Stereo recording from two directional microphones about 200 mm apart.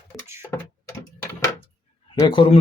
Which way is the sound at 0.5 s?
10° left (ahead or behind).